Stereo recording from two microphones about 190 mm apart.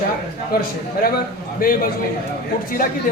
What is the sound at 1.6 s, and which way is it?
Speech, 45° left (ahead or behind).